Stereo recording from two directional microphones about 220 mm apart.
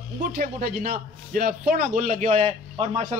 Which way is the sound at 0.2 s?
40° right (ahead or behind).